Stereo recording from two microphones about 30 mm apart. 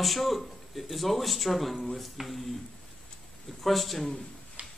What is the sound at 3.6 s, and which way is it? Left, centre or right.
Speech, centre.